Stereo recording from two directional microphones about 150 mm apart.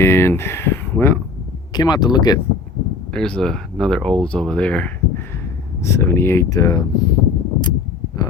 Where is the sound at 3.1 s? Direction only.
5° left (ahead or behind); by 6.8 s 25° left (ahead or behind).